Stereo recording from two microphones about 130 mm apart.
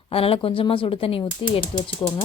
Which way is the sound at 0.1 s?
45° left (ahead or behind).